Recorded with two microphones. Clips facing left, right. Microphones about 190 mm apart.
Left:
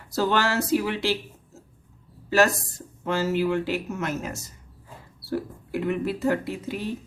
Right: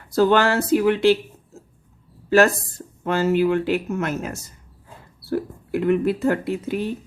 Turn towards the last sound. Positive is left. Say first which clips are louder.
# right 6 dB
turn(degrees=-55)  # may be behind; listen again after turning